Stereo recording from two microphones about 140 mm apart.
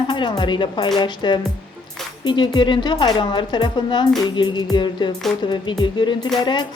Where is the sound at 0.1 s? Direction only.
35° left (ahead or behind).